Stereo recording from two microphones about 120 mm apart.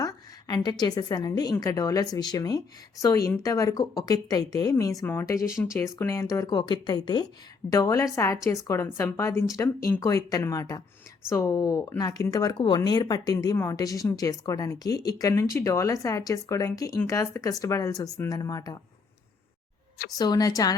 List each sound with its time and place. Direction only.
0.0 s a woman's voice: 30° left (ahead or behind)
20.1 s a woman's voice: 30° left (ahead or behind)